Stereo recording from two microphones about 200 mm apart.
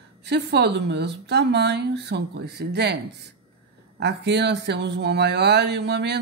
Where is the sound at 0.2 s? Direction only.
55° right (ahead or behind).